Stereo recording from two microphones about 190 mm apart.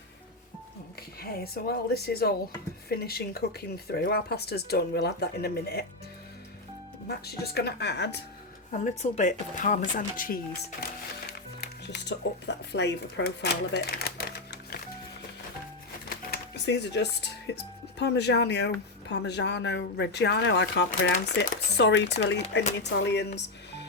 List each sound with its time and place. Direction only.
1.2 s speech: 55° left (ahead or behind)
7.1 s speech: 55° left (ahead or behind)
8.7 s speech: 40° left (ahead or behind)
11.6 s speech: 60° left (ahead or behind)
16.0 s music: 60° left (ahead or behind)
18.0 s speech: 60° left (ahead or behind)